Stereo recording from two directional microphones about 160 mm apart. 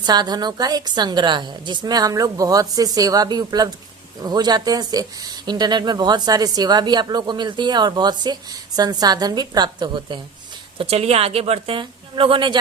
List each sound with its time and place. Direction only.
0.0 s speech: 25° right (ahead or behind)
10.8 s a woman's voice: 40° right (ahead or behind)